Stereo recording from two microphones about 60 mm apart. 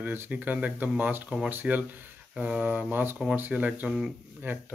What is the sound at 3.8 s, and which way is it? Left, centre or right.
Speech, centre.